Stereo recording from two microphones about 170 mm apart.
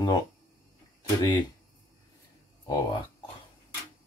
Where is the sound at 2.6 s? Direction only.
25° left (ahead or behind).